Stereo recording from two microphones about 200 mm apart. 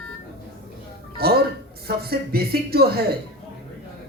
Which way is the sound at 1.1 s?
50° right (ahead or behind).